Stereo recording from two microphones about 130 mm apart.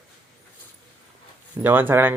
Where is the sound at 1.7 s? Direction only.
15° right (ahead or behind).